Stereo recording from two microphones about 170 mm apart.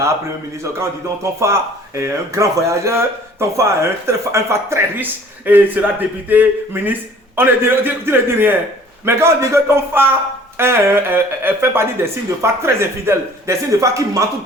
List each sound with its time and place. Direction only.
0.6 s speech: 15° right (ahead or behind)